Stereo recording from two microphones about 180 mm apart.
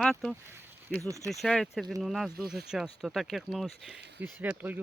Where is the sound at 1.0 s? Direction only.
15° right (ahead or behind).